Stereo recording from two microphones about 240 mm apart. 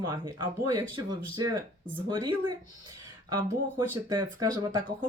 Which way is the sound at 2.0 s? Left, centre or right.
Centre.